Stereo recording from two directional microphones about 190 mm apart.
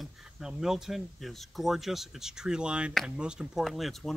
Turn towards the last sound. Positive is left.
turn(degrees=0)  # may be behind; listen again after turning